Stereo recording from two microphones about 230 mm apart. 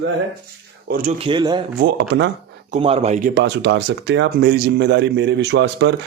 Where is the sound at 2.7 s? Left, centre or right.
Right.